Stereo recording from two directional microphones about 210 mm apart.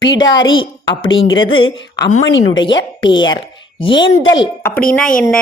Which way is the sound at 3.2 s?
25° left (ahead or behind).